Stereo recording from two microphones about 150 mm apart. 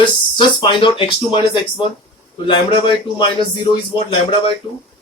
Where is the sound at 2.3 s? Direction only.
35° left (ahead or behind).